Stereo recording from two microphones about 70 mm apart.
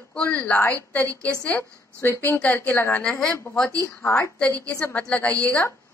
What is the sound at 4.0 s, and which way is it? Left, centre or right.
Speech, left.